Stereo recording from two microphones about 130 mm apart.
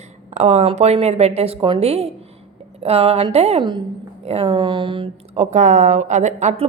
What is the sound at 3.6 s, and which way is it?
Speech, 35° right (ahead or behind).